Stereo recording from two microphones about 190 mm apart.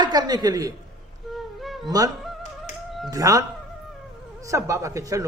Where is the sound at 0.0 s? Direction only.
20° right (ahead or behind).